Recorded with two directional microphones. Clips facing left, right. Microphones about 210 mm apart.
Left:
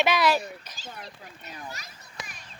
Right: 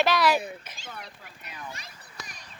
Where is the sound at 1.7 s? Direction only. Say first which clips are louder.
Left 2 dB; 35° right (ahead or behind).